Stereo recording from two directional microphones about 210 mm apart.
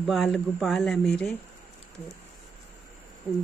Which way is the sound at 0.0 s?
Centre (ahead or behind).